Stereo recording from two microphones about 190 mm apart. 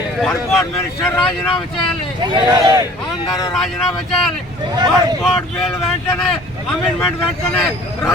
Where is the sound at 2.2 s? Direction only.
20° right (ahead or behind).